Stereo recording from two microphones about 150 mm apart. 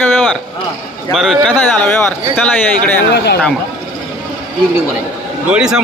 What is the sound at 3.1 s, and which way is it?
Speech, 90° left.